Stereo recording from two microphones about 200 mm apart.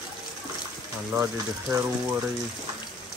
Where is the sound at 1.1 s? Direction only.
15° right (ahead or behind).